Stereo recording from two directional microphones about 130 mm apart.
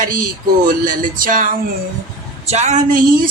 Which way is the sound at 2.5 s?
60° right (ahead or behind).